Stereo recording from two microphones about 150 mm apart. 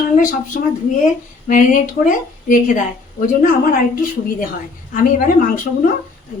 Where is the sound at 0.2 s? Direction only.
65° left (ahead or behind).